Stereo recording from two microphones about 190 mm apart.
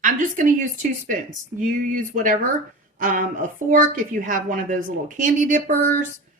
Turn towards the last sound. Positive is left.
turn(degrees=-45)  # may be behind; listen again after turning